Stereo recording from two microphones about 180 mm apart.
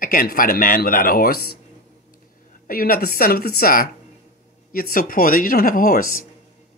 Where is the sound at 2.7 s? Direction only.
55° left (ahead or behind).